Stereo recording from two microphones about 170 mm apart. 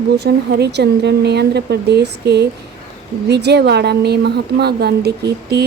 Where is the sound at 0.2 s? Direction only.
75° right (ahead or behind).